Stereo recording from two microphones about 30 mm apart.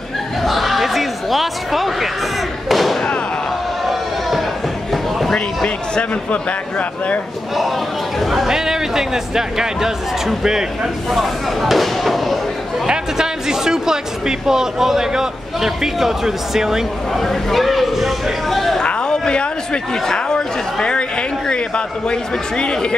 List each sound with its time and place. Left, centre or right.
0.4 s a sound: centre
2.7 s thump: centre
3.8 s a sound: centre
8.2 s speech: centre
8.5 s speech: centre
11.1 s speech: centre
12.8 s speech: right
17.1 s speech: centre
19.0 s a sound: left
20.3 s speech: left